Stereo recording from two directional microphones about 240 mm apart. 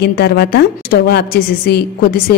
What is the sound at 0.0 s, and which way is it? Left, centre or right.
A woman's voice, left.